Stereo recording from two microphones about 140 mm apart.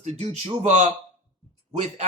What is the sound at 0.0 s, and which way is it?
A man's voice, 55° right (ahead or behind).